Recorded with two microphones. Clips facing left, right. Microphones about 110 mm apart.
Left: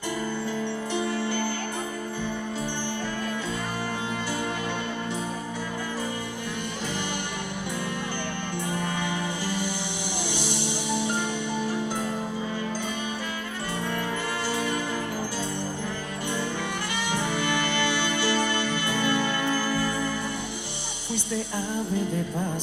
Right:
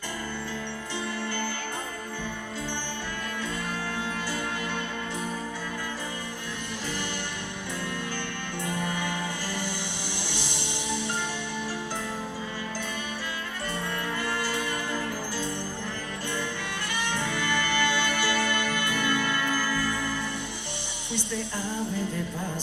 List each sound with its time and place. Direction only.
0.9 s music: 15° left (ahead or behind)
8.6 s music: 20° left (ahead or behind)
17.1 s music: 15° left (ahead or behind)